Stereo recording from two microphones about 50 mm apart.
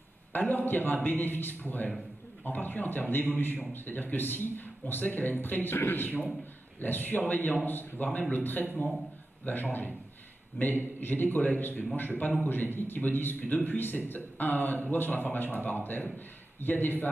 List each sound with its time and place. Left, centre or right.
0.3 s a sound: left
0.7 s speech: left
11.0 s speech: left